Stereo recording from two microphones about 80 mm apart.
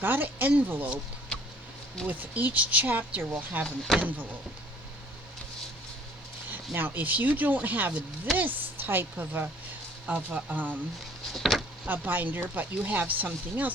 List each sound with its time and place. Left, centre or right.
0.0 s speech: right
2.0 s speech: right
3.6 s speech: centre
6.7 s speech: right
11.3 s speech: centre
11.9 s speech: right